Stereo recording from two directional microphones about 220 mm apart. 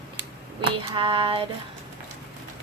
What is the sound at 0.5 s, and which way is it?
Female singing, 20° right (ahead or behind).